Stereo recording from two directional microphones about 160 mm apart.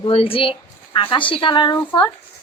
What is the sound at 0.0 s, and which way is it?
Speech, 35° left (ahead or behind).